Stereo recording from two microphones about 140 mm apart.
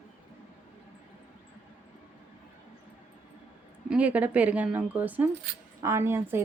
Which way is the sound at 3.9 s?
10° right (ahead or behind).